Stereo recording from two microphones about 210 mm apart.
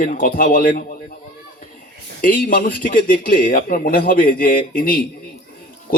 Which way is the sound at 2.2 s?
40° left (ahead or behind).